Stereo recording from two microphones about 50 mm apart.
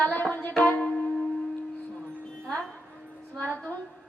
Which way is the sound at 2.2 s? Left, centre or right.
Centre.